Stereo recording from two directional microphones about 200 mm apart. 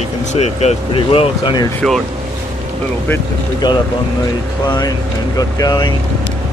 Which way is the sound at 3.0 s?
10° left (ahead or behind).